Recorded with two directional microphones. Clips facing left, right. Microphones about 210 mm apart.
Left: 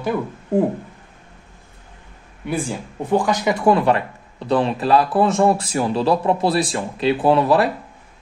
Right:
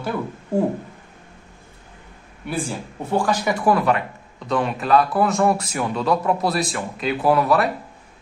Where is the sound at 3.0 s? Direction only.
20° left (ahead or behind).